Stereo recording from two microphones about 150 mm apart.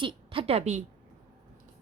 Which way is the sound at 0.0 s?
35° right (ahead or behind).